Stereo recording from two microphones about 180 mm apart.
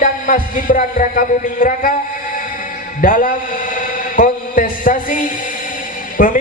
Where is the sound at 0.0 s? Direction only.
50° left (ahead or behind).